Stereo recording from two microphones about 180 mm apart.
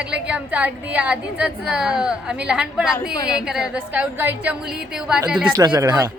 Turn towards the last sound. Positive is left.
turn(degrees=-20)  # may be behind; listen again after turning